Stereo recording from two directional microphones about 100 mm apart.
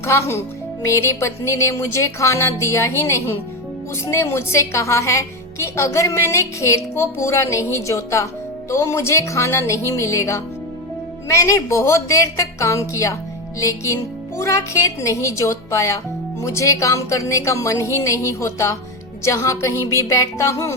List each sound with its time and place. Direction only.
0.0 s a woman's voice: 30° left (ahead or behind)